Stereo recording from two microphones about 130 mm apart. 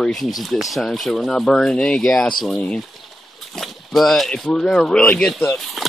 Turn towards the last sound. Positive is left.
turn(degrees=0)  # may be behind; listen again after turning